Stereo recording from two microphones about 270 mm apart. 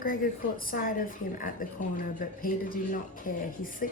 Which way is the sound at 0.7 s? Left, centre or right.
Left.